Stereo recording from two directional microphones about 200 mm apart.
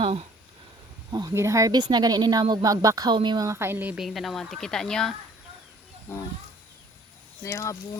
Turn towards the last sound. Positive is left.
turn(degrees=15)  # may be behind; listen again after turning